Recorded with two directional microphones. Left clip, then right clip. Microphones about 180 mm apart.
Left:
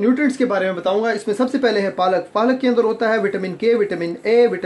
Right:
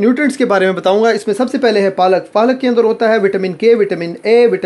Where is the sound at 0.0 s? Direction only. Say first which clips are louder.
Right 5 dB; 35° right (ahead or behind).